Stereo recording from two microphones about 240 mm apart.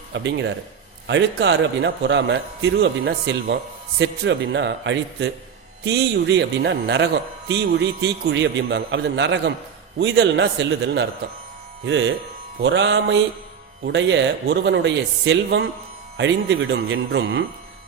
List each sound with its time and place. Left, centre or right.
0.1 s a man's voice: right